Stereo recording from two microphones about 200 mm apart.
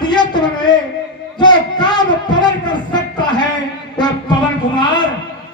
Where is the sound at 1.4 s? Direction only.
20° left (ahead or behind).